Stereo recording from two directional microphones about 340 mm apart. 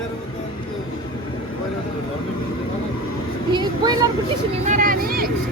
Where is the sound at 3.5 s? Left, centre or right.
Centre.